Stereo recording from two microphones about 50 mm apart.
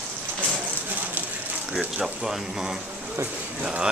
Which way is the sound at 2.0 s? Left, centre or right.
Right.